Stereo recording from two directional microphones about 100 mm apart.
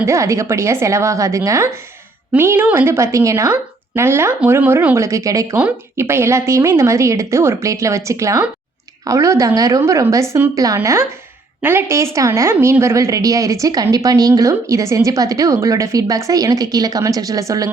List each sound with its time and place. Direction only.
0.0 s a woman's voice: 30° right (ahead or behind)
4.9 s a woman's voice: 30° right (ahead or behind)
11.6 s a woman's voice: 25° right (ahead or behind)